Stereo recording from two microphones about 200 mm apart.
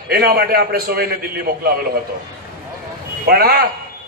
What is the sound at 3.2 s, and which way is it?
Speech, 50° right (ahead or behind).